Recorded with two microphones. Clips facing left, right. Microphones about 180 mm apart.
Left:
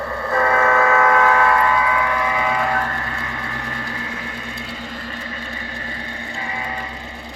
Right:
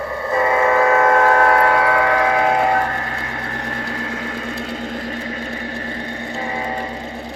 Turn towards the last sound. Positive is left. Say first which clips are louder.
# right 5 dB
turn(degrees=-35)  # may be behind; listen again after turning